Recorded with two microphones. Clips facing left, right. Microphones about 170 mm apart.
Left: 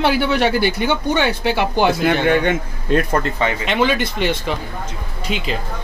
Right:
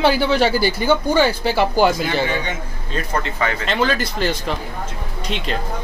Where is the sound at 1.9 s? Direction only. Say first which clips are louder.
Left 5 dB; 60° left (ahead or behind).